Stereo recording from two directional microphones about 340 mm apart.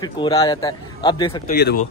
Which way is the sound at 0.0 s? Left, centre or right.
Centre.